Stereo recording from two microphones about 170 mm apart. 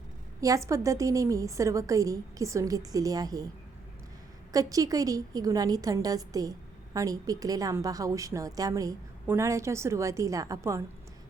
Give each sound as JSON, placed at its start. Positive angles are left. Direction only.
{"t": 0.4, "sound": "a woman's voice", "side_deg": -20}
{"t": 4.5, "sound": "a woman's voice", "side_deg": -20}